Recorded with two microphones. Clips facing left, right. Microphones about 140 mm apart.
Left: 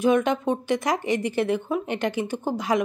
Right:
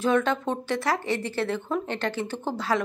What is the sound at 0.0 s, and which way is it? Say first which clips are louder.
Speech: left 3 dB; 15° left (ahead or behind).